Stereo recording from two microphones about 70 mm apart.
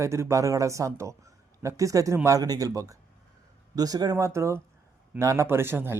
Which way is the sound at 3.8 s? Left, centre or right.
Right.